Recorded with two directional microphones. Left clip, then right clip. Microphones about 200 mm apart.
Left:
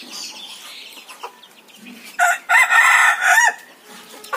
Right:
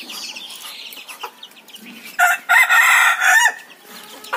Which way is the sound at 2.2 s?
10° right (ahead or behind).